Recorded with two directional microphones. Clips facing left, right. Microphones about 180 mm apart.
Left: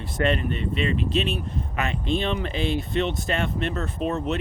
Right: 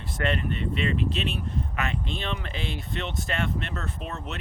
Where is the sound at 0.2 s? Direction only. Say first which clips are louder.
Left 4 dB; 20° left (ahead or behind).